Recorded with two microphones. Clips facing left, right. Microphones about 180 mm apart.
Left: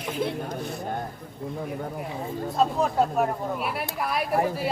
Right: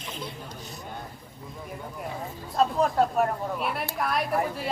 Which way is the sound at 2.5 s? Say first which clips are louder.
Even; centre (ahead or behind).